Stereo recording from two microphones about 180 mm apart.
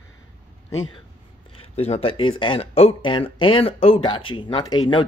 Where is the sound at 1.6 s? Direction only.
35° left (ahead or behind).